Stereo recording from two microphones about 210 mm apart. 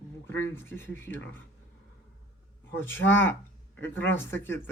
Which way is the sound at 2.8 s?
10° left (ahead or behind).